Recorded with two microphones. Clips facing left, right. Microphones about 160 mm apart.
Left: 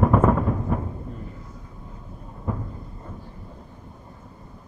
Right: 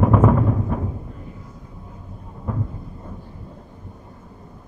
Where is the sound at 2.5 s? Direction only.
Centre (ahead or behind).